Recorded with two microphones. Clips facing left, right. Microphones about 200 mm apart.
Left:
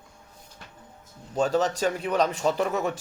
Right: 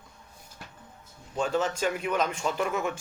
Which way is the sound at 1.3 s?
40° left (ahead or behind).